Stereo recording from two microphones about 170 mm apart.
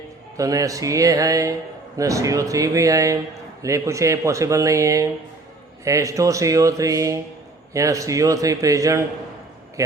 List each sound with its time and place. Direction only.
0.3 s speech: 20° right (ahead or behind)